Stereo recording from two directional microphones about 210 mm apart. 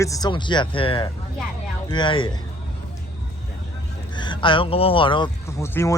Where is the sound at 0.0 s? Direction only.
15° left (ahead or behind).